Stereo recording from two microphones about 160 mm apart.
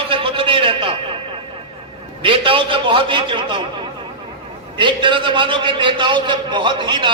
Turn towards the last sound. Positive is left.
turn(degrees=-30)  # may be behind; listen again after turning